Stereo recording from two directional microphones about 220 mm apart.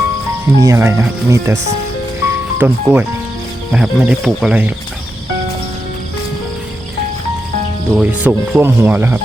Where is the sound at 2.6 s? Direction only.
10° right (ahead or behind).